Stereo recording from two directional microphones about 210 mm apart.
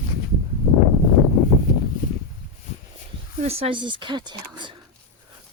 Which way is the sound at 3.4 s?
30° right (ahead or behind).